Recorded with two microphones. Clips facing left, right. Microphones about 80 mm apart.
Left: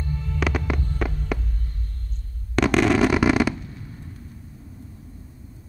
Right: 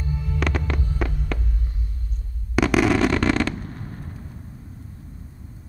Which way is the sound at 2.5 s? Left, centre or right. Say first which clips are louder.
Even; centre.